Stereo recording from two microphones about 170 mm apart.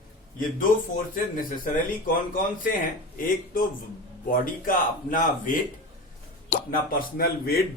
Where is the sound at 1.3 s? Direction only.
50° left (ahead or behind).